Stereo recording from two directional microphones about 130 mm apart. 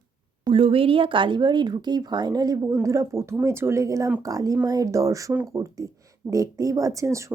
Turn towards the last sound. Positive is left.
turn(degrees=-25)  # may be behind; listen again after turning